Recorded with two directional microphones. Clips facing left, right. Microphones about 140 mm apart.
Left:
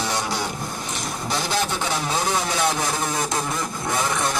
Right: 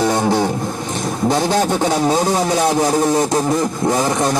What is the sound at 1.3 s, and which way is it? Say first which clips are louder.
Speech: right 8 dB; 45° right (ahead or behind).